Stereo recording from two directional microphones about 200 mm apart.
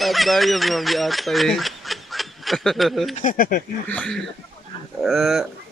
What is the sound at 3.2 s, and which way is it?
Speech, 40° left (ahead or behind).